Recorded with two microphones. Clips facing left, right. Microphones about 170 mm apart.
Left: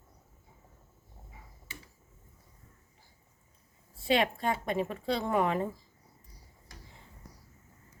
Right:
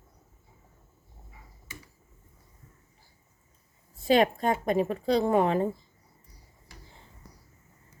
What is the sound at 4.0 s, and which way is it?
A woman's voice, 45° right (ahead or behind).